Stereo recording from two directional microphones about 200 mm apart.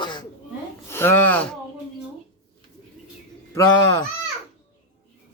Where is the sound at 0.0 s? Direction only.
25° left (ahead or behind).